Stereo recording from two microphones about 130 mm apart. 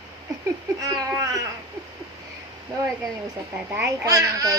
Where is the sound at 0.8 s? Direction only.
25° right (ahead or behind).